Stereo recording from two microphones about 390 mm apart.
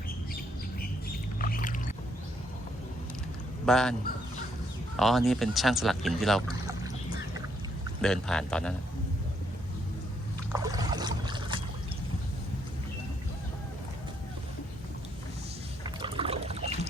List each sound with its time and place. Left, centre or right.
1.4 s boat: left
3.7 s speech: centre
4.9 s speech: centre
8.0 s speech: centre
10.5 s boat: centre
16.0 s rowboat: centre